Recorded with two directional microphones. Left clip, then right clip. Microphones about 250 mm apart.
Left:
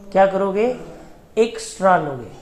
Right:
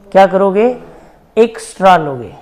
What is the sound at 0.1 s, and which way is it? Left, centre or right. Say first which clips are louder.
A man's voice: right 8 dB; right.